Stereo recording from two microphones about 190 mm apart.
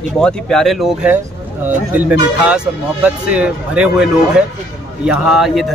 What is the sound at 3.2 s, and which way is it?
Speech, 5° right (ahead or behind).